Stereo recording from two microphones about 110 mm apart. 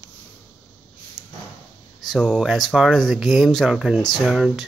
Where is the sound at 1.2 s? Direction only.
35° left (ahead or behind).